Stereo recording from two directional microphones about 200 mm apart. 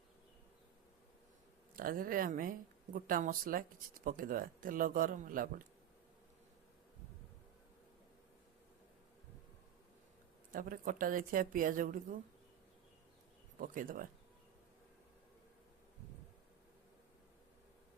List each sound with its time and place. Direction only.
1.7 s speech: 45° right (ahead or behind)
10.5 s speech: 45° right (ahead or behind)
13.6 s speech: 45° right (ahead or behind)